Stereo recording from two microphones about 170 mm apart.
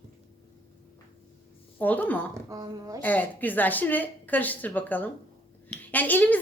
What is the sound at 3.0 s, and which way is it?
A woman's voice, 10° left (ahead or behind).